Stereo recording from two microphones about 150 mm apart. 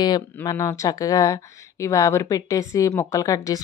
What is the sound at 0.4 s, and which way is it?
A woman's voice, 20° left (ahead or behind).